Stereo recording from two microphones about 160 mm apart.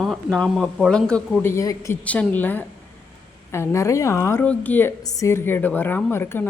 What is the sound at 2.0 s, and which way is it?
A woman's voice, 10° left (ahead or behind).